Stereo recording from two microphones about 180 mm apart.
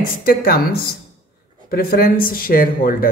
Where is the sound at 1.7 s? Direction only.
55° left (ahead or behind).